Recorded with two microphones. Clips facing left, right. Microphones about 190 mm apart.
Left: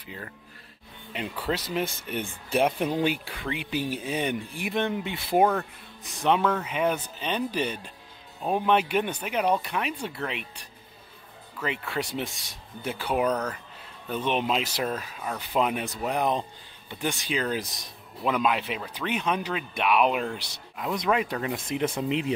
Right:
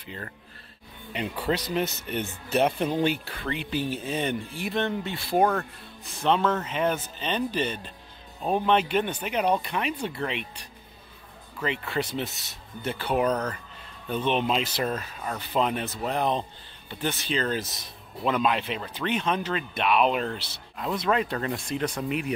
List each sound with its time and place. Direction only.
0.0 s speech: 10° left (ahead or behind)
5.4 s speech: centre (ahead or behind)
11.9 s speech: 10° left (ahead or behind)
21.9 s speech: 25° left (ahead or behind)